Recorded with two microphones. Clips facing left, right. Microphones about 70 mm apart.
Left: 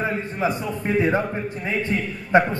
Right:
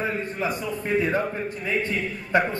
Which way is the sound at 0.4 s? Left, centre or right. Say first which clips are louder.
Left 3 dB; left.